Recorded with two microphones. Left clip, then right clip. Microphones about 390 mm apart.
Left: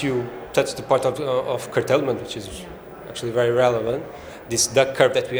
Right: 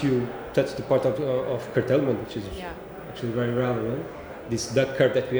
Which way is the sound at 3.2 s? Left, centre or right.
Left.